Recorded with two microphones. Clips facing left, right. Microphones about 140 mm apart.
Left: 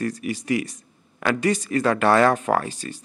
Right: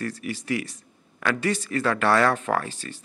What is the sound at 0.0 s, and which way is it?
Speech, 15° left (ahead or behind).